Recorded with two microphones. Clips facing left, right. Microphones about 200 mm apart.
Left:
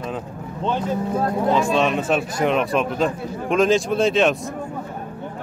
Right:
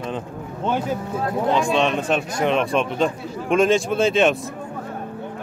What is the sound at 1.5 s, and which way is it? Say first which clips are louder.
A man's voice: even; 5° left (ahead or behind).